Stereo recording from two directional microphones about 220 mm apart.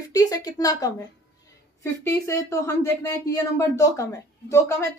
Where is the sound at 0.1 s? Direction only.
15° left (ahead or behind).